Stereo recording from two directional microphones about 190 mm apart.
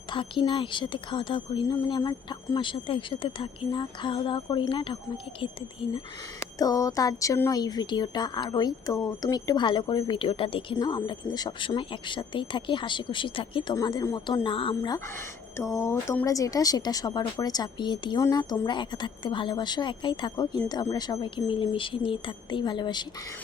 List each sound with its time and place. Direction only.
0.1 s speech: 25° left (ahead or behind)
6.4 s speech: 20° left (ahead or behind)